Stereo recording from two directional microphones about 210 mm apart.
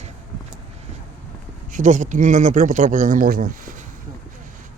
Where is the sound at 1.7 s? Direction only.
35° right (ahead or behind).